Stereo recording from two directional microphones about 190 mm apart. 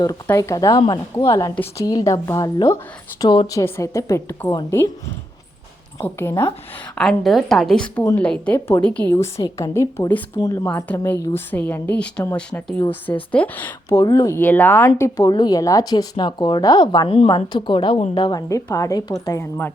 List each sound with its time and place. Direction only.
0.0 s speech: 15° left (ahead or behind)
6.9 s a woman's voice: centre (ahead or behind)
9.4 s speech: 20° left (ahead or behind)
14.0 s speech: 20° left (ahead or behind)